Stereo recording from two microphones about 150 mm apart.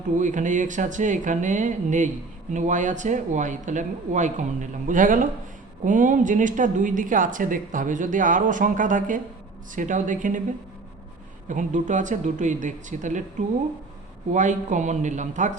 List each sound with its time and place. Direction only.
0.2 s a woman's voice: 55° right (ahead or behind)
11.4 s a woman's voice: 55° right (ahead or behind)
14.3 s a woman's voice: 55° right (ahead or behind)